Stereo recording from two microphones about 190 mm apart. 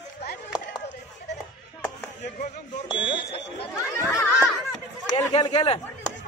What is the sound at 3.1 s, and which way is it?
Speech, 30° left (ahead or behind).